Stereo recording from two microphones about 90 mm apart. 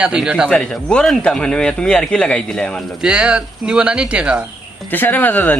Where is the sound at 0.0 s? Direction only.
10° right (ahead or behind).